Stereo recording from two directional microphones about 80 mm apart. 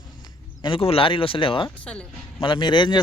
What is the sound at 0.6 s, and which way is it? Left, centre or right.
Speech, left.